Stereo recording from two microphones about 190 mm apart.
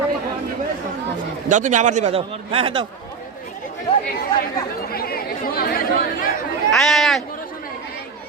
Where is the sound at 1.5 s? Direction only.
40° right (ahead or behind).